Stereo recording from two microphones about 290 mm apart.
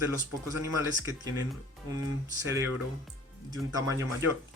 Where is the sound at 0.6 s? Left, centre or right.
Centre.